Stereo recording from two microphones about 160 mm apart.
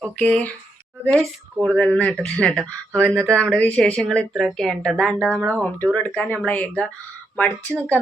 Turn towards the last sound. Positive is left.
turn(degrees=10)  # may be behind; listen again after turning